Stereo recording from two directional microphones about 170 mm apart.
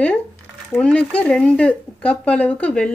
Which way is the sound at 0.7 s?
5° left (ahead or behind).